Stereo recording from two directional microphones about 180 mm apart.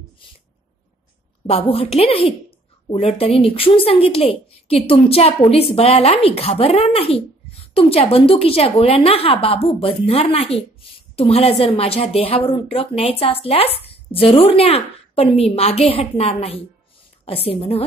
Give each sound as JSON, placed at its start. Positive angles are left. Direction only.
{"t": 1.5, "sound": "a woman's voice", "side_deg": 35}